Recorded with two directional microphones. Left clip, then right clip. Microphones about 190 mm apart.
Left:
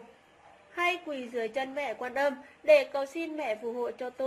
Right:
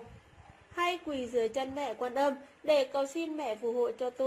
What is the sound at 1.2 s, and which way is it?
A woman's voice, 25° right (ahead or behind).